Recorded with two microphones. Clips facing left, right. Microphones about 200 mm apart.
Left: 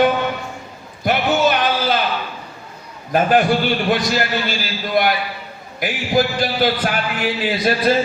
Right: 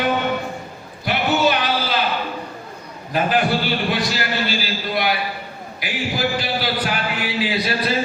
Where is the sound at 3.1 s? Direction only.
45° left (ahead or behind).